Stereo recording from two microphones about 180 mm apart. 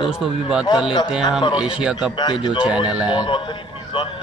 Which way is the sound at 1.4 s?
25° left (ahead or behind).